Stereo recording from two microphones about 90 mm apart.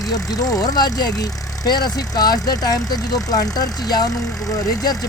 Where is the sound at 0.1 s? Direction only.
40° left (ahead or behind).